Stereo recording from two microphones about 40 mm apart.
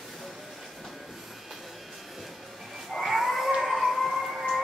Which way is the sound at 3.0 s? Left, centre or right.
Centre.